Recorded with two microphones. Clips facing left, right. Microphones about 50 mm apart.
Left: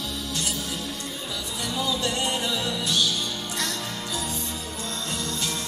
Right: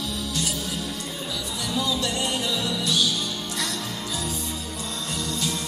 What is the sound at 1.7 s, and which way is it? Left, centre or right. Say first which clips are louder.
Music: right 1 dB; centre.